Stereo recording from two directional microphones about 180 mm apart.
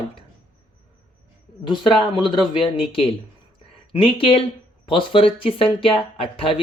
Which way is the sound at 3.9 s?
30° left (ahead or behind).